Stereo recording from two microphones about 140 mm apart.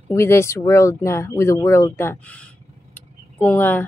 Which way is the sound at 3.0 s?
15° left (ahead or behind).